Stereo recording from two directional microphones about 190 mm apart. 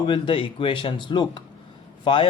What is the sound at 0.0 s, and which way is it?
Speech, 25° left (ahead or behind).